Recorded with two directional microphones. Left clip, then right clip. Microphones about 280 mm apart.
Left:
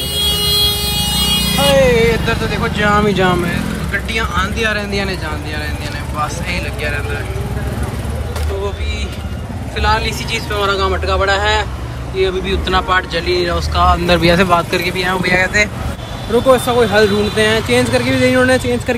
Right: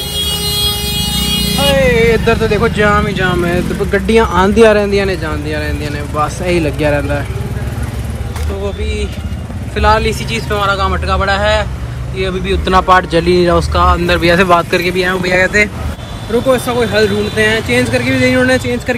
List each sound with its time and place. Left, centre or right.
1.6 s speech: centre
3.4 s speech: centre
9.8 s speech: centre